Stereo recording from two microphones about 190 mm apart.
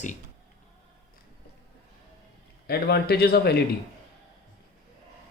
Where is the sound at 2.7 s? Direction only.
55° left (ahead or behind).